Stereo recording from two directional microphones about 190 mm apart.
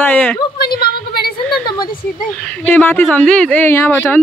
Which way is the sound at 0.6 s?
55° left (ahead or behind).